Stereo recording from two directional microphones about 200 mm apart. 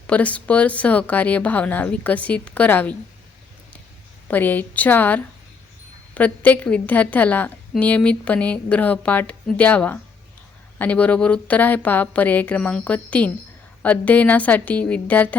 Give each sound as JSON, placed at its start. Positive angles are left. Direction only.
{"t": 0.1, "sound": "a woman's voice", "side_deg": 5}
{"t": 4.3, "sound": "a woman's voice", "side_deg": 10}